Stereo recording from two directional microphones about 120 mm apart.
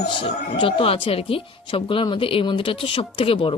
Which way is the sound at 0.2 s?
45° left (ahead or behind).